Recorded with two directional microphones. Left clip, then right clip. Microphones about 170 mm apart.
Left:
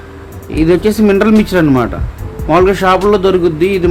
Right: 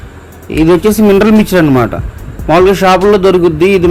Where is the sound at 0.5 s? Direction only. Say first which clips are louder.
Right 3 dB; 20° right (ahead or behind).